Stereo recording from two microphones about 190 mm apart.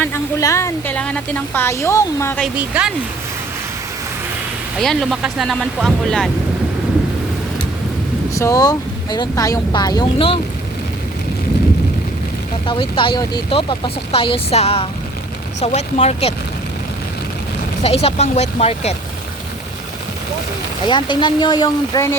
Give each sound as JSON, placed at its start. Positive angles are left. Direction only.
{"t": 0.0, "sound": "speech", "side_deg": 15}
{"t": 2.4, "sound": "speech", "side_deg": -5}
{"t": 4.8, "sound": "speech", "side_deg": 0}
{"t": 8.4, "sound": "speech", "side_deg": 15}
{"t": 12.6, "sound": "speech", "side_deg": 25}
{"t": 17.8, "sound": "speech", "side_deg": 35}
{"t": 20.8, "sound": "speech", "side_deg": 25}